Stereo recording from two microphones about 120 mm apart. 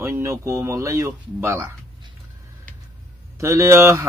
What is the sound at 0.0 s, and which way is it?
Speech, 20° right (ahead or behind).